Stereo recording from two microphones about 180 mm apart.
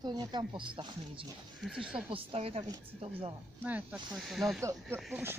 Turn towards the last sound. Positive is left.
turn(degrees=-10)  # may be behind; listen again after turning